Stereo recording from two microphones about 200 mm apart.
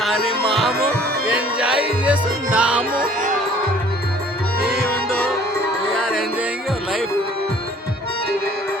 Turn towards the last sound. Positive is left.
turn(degrees=-5)  # may be behind; listen again after turning